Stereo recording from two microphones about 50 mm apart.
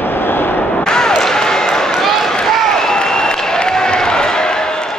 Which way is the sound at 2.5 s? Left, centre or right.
Centre.